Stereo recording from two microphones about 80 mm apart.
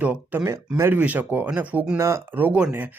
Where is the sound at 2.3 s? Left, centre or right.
Centre.